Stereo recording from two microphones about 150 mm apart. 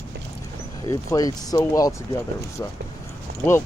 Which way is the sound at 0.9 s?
25° left (ahead or behind).